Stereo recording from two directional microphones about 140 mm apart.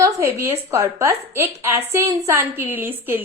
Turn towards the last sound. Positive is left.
turn(degrees=-15)  # may be behind; listen again after turning